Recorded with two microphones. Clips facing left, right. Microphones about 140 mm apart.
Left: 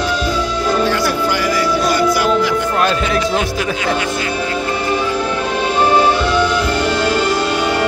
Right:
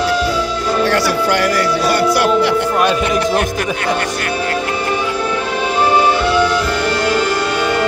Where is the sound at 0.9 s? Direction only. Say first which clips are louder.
Right 2 dB; 70° right (ahead or behind).